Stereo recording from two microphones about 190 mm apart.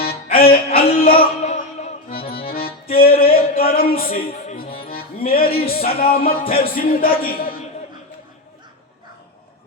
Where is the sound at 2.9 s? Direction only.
50° left (ahead or behind).